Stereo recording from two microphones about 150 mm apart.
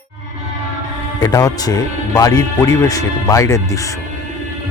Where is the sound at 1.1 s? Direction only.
25° left (ahead or behind).